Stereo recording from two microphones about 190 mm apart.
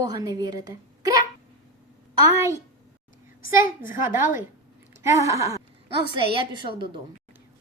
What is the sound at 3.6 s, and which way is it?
Speech, 45° left (ahead or behind).